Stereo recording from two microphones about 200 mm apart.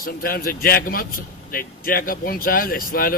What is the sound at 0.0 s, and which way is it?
Speech, 45° left (ahead or behind).